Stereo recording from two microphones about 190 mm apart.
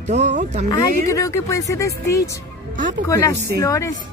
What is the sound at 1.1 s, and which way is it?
Speech, 15° left (ahead or behind).